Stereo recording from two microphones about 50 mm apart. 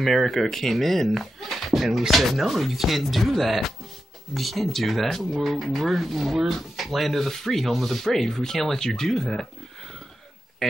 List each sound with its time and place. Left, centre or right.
0.0 s speech: centre